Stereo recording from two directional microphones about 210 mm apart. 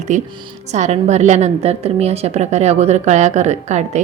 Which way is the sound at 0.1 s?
35° right (ahead or behind).